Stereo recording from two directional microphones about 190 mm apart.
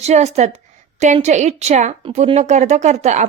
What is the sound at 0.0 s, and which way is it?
Speech, 35° right (ahead or behind).